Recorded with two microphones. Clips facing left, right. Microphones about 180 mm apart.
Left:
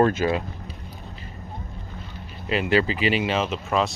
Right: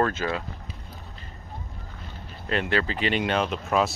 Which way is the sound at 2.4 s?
5° left (ahead or behind).